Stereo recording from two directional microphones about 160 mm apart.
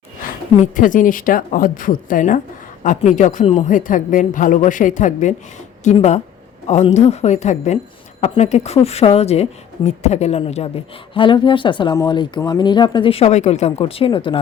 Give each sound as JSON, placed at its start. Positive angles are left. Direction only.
{"t": 0.2, "sound": "a woman's voice", "side_deg": 55}
{"t": 3.7, "sound": "a woman's voice", "side_deg": 55}